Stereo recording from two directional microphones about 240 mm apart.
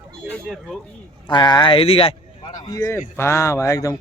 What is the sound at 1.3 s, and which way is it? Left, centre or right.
Speech, centre.